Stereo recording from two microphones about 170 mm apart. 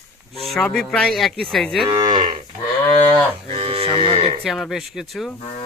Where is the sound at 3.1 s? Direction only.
35° right (ahead or behind).